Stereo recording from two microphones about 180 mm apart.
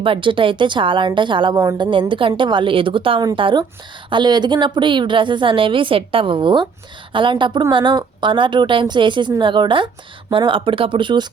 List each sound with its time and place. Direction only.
0.0 s a woman's voice: 30° right (ahead or behind)